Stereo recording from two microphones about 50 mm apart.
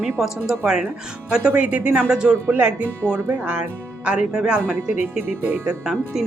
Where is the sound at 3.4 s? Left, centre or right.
Right.